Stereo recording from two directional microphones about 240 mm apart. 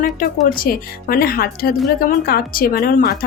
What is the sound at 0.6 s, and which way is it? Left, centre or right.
Speech, left.